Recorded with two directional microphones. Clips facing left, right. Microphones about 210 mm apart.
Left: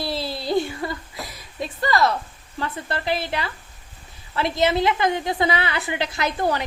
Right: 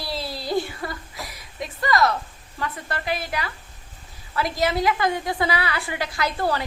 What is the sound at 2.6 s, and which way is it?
A woman's voice, 30° left (ahead or behind).